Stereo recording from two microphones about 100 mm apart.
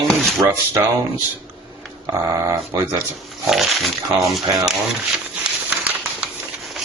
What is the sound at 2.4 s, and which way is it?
Speech, 30° right (ahead or behind).